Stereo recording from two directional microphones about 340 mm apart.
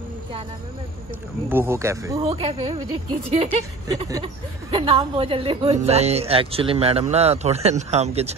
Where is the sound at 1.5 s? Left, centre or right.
Centre.